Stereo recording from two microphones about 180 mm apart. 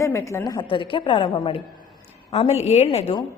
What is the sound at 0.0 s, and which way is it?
A woman's voice, 15° left (ahead or behind).